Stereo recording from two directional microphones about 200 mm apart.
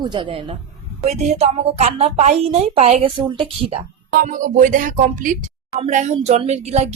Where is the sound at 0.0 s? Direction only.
25° right (ahead or behind).